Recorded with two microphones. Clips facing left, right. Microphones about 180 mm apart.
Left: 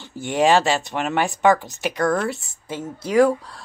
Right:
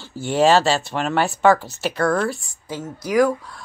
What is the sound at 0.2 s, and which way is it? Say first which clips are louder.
Speech: right 1 dB; 15° left (ahead or behind).